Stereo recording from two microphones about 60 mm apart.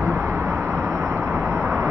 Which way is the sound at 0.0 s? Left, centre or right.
Right.